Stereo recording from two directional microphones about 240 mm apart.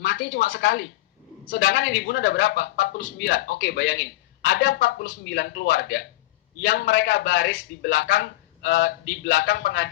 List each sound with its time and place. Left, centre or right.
0.0 s speech: left